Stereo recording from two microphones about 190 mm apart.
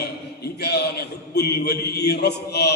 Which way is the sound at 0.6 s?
60° left (ahead or behind).